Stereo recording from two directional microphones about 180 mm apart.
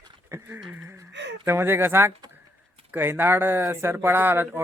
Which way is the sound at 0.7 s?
10° right (ahead or behind).